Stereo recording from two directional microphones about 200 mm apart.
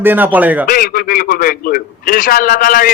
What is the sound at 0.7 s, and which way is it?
A man's voice, 45° left (ahead or behind).